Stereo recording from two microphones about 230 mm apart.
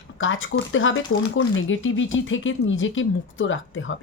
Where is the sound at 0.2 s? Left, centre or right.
Left.